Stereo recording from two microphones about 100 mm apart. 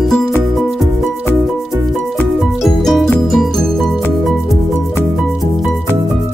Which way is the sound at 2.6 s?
Centre (ahead or behind).